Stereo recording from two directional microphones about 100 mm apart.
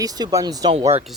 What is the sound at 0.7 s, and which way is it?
Speech, 80° right.